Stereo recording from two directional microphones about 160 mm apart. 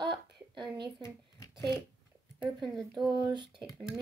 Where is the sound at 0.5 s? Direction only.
30° right (ahead or behind).